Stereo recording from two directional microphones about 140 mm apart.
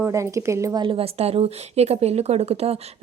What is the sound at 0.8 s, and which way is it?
Speech, 40° right (ahead or behind).